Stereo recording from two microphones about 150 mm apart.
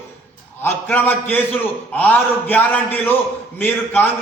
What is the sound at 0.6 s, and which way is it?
A man's voice, 15° left (ahead or behind).